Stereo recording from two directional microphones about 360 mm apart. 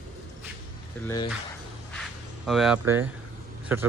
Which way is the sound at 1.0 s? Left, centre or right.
Centre.